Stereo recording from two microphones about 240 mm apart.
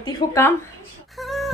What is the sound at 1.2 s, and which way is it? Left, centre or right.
Beatboxing, centre.